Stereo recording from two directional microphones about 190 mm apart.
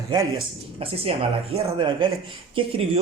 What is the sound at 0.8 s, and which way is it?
Speech, 30° right (ahead or behind).